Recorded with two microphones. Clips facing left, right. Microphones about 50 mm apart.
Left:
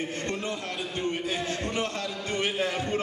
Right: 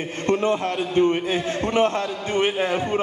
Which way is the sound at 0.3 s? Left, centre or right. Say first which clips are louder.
Right 11 dB; right.